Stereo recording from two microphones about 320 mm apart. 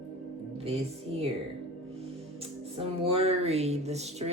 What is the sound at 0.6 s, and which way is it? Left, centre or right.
Music, centre.